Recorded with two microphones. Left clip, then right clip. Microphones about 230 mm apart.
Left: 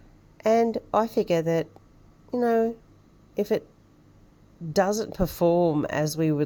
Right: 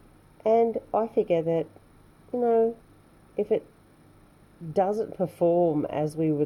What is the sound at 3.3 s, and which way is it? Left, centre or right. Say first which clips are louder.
Speech: even; centre.